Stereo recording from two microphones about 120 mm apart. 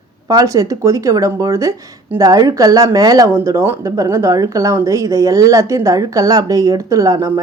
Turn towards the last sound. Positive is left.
turn(degrees=-30)  # may be behind; listen again after turning